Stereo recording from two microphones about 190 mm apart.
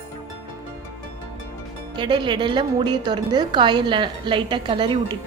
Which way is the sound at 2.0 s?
25° right (ahead or behind).